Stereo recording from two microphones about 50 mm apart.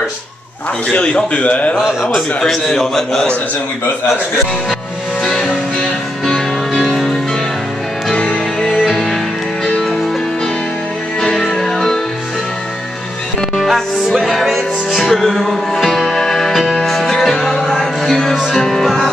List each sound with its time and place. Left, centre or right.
0.8 s a man's voice: centre
2.1 s a man's voice: centre
5.2 s music: centre
8.1 s music: left
8.9 s music: centre
11.1 s music: centre
13.6 s music: centre
18.3 s music: centre
18.6 s music: centre